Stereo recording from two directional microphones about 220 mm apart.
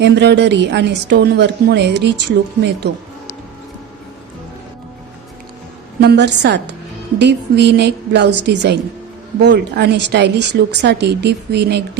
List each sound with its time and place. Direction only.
0.0 s a woman's voice: 50° right (ahead or behind)
6.0 s a woman's voice: 50° right (ahead or behind)